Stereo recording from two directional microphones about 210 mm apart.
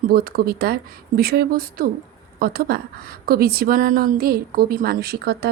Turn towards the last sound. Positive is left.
turn(degrees=-50)  # may be behind; listen again after turning